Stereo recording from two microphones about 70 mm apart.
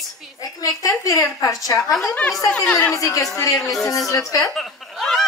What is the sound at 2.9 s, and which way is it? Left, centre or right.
Speech, left.